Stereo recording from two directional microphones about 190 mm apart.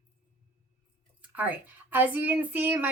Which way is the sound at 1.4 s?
10° right (ahead or behind).